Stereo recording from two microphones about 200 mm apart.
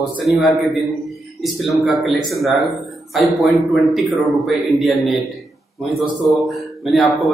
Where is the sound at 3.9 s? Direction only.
Centre (ahead or behind).